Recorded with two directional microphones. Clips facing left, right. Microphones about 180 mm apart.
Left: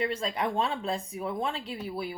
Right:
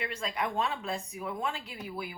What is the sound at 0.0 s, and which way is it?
Speech, 30° left (ahead or behind).